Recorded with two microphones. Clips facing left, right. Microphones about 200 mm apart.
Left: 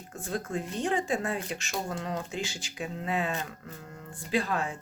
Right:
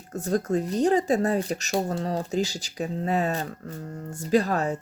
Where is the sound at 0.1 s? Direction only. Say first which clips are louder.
Right 9 dB; 40° right (ahead or behind).